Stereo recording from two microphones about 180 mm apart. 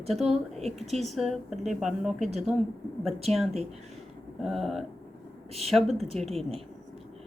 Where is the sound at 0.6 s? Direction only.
35° right (ahead or behind).